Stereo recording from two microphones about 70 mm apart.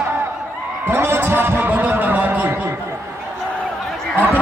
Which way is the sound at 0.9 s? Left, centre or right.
Right.